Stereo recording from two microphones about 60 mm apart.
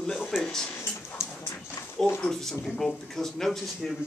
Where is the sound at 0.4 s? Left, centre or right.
Centre.